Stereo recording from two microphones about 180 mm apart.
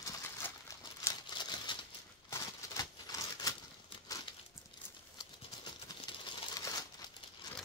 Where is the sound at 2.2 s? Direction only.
20° left (ahead or behind).